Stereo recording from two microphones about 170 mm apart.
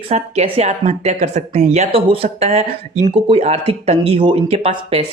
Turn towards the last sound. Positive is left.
turn(degrees=-35)  # may be behind; listen again after turning